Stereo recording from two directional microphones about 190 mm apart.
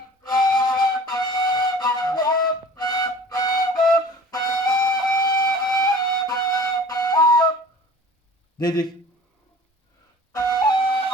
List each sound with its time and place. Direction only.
0.2 s flute: 20° left (ahead or behind)
8.5 s speech: 20° left (ahead or behind)
10.3 s flute: 20° left (ahead or behind)